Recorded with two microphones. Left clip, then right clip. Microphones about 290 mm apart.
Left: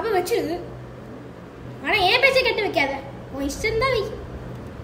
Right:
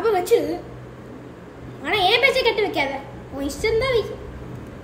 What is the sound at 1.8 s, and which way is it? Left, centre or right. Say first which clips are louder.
A woman's voice: even; centre.